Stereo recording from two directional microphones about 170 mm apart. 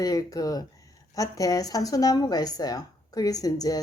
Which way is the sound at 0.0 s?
20° left (ahead or behind).